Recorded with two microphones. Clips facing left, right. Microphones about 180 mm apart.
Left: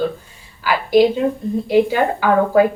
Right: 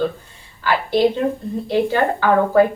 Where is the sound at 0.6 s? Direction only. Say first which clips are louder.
Left 3 dB; 10° left (ahead or behind).